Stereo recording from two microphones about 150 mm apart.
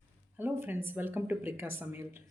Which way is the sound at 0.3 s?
15° right (ahead or behind).